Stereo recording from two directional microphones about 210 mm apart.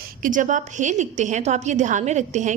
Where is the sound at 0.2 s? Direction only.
40° right (ahead or behind).